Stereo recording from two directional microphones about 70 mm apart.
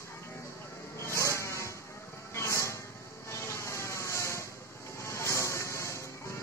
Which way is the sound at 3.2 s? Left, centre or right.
Left.